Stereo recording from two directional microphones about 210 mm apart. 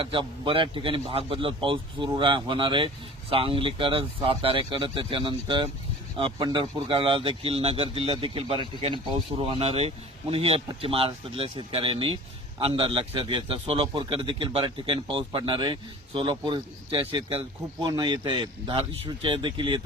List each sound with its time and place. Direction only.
0.0 s speech: 25° right (ahead or behind)